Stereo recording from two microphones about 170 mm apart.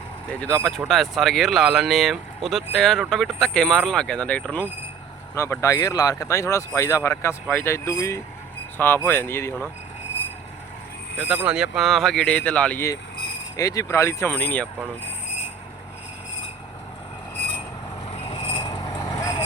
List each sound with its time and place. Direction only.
0.4 s speech: 10° left (ahead or behind)
11.3 s speech: 5° right (ahead or behind)
18.1 s vehicle: 35° left (ahead or behind)
18.9 s vehicle: 20° left (ahead or behind)